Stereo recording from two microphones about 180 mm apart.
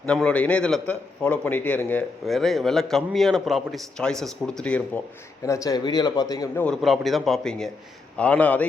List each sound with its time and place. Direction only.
0.0 s a man's voice: 5° left (ahead or behind)
5.5 s speech: 20° left (ahead or behind)
6.6 s a man's voice: centre (ahead or behind)